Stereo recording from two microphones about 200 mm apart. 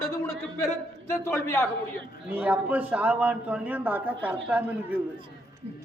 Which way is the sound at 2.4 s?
5° right (ahead or behind).